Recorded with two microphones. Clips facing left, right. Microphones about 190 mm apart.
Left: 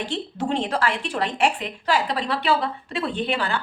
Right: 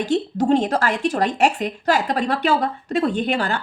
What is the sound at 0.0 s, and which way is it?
A woman's voice, 40° right (ahead or behind).